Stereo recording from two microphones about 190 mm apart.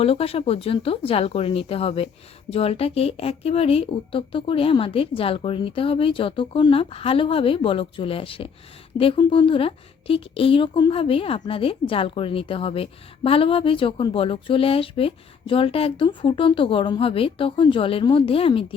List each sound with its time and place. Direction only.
0.0 s a woman's voice: 30° left (ahead or behind)